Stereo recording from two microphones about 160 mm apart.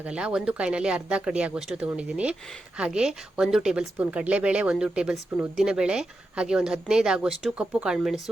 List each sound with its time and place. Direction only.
0.0 s speech: 5° right (ahead or behind)